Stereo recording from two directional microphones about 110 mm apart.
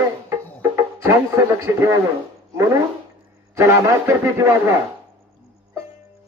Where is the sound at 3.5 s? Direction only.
25° right (ahead or behind).